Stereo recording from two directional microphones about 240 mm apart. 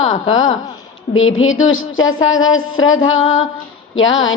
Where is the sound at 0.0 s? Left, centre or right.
Left.